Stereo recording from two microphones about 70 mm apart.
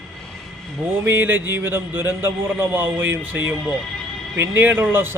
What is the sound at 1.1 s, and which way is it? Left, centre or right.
Speech, right.